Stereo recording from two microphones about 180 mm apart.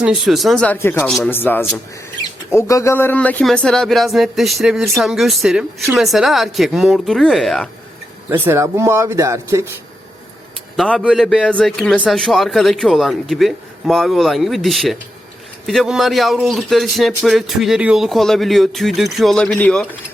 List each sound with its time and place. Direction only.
0.0 s a man's voice: 5° right (ahead or behind)
8.3 s speech: 15° right (ahead or behind)
10.8 s a man's voice: centre (ahead or behind)